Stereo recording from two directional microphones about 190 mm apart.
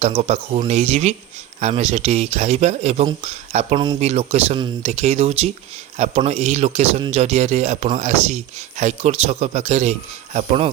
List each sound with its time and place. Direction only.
0.0 s speech: 35° right (ahead or behind)